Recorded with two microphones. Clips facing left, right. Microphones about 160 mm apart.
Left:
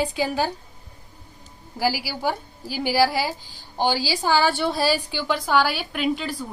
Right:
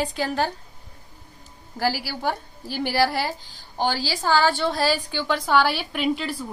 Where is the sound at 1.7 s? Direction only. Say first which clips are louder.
Left 1 dB; 5° left (ahead or behind).